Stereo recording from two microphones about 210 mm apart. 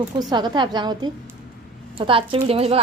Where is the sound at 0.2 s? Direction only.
20° right (ahead or behind).